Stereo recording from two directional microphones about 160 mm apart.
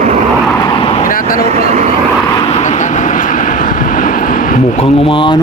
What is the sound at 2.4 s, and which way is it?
Vehicle, 40° left (ahead or behind).